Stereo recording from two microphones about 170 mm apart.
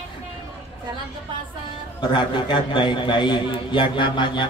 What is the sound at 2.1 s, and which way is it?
A man's voice, 30° left (ahead or behind).